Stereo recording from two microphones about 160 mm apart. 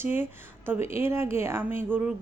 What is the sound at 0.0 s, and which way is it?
Speech, 15° right (ahead or behind).